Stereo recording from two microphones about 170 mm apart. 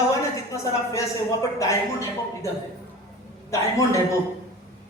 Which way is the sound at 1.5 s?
20° left (ahead or behind).